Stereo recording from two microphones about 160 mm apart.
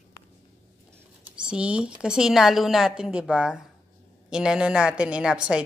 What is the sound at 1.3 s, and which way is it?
A woman's voice, 5° right (ahead or behind).